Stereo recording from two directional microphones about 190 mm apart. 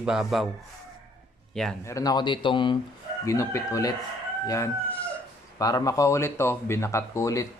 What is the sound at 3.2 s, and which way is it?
Speech, 15° left (ahead or behind).